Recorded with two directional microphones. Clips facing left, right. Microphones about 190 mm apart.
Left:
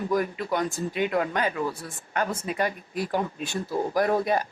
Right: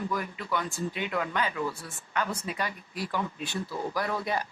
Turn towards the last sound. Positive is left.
turn(degrees=50)  # may be behind; listen again after turning